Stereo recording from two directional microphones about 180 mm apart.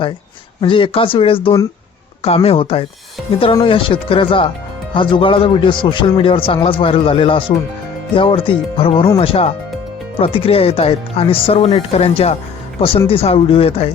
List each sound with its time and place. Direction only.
0.6 s a man's voice: 30° left (ahead or behind)